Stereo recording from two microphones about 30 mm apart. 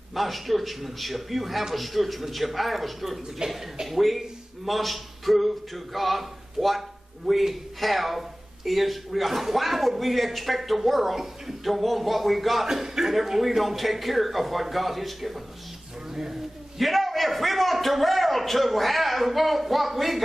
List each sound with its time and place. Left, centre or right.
0.1 s speech: centre
3.4 s speech: right
3.8 s speech: centre
12.6 s a man's voice: centre
16.7 s a man's voice: centre